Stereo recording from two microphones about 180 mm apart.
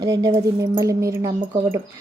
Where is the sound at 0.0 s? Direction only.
20° right (ahead or behind).